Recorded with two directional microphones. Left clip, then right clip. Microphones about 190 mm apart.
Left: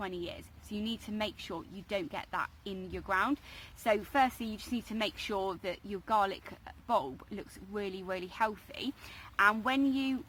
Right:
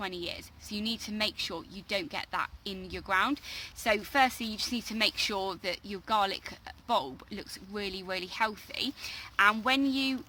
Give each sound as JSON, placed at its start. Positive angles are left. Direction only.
{"t": 0.0, "sound": "speech", "side_deg": -10}